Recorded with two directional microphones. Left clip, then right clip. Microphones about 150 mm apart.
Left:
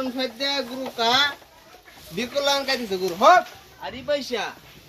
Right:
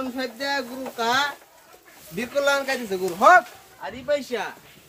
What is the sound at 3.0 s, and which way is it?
Speech, centre (ahead or behind).